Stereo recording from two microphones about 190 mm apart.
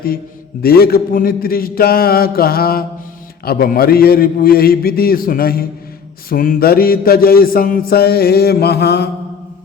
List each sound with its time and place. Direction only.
0.6 s mantra: 55° left (ahead or behind)